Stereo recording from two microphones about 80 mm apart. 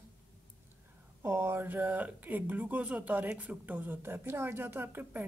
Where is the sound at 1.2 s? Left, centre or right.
Right.